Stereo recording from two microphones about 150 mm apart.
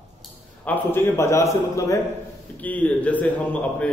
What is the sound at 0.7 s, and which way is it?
A man's voice, 15° left (ahead or behind).